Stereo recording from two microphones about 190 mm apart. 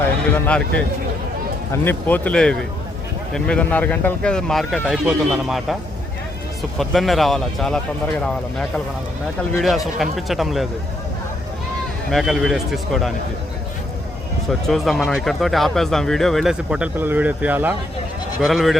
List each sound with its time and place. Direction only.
1.7 s speech: 10° left (ahead or behind)
12.1 s speech: centre (ahead or behind)
14.7 s speech: centre (ahead or behind)